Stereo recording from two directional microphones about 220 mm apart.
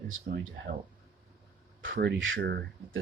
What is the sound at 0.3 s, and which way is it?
Speech, 50° right (ahead or behind).